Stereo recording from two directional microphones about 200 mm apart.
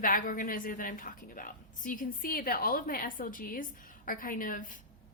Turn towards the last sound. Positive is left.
turn(degrees=40)  # may be behind; listen again after turning